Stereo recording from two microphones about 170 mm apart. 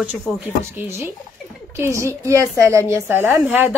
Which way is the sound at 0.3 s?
5° right (ahead or behind).